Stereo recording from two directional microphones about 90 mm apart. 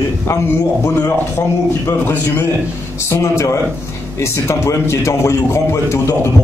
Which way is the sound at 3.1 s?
30° left (ahead or behind).